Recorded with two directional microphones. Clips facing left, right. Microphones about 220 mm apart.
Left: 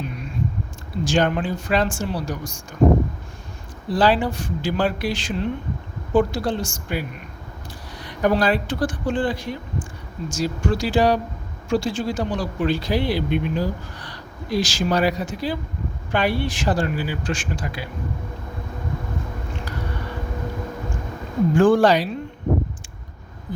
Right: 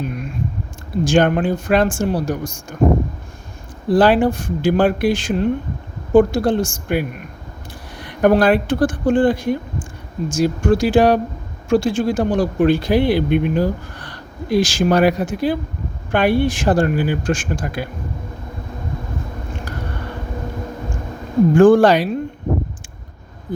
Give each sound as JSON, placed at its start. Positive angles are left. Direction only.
{"t": 0.0, "sound": "a sound", "side_deg": -50}
{"t": 1.0, "sound": "speech", "side_deg": -50}
{"t": 3.8, "sound": "speech", "side_deg": -50}
{"t": 21.5, "sound": "speech", "side_deg": -50}